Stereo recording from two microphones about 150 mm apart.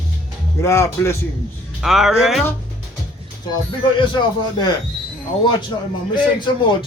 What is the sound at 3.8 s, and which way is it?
Speech, 30° left (ahead or behind).